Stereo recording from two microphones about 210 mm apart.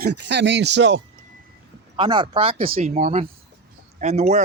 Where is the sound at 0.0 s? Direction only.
55° right (ahead or behind).